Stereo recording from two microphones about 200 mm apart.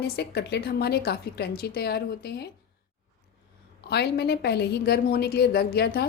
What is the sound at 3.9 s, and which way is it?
A woman's voice, 55° left (ahead or behind).